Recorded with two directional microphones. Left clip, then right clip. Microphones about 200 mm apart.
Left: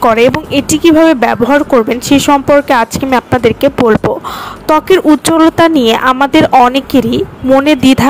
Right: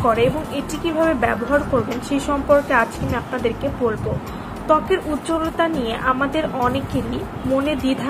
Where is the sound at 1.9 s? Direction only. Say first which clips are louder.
Left 14 dB; 55° left (ahead or behind).